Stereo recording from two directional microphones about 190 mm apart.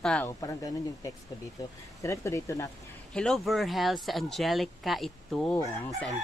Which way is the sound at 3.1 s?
5° left (ahead or behind).